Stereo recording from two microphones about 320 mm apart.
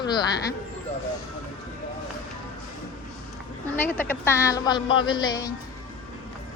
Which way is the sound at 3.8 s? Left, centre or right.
Centre.